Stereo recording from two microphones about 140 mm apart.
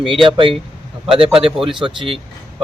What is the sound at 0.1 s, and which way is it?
Speech, 35° right (ahead or behind).